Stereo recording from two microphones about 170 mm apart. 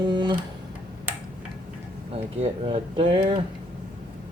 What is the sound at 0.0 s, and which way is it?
Guitar, 25° right (ahead or behind).